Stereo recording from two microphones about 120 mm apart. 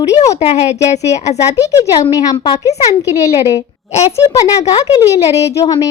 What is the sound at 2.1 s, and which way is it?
Speech, 30° left (ahead or behind).